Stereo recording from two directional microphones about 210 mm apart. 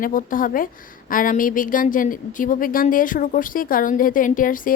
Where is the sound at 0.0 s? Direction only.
40° left (ahead or behind).